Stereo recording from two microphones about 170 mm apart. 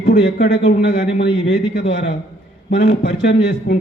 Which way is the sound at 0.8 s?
70° left (ahead or behind).